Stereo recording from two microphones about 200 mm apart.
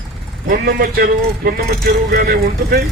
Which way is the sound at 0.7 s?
50° right (ahead or behind).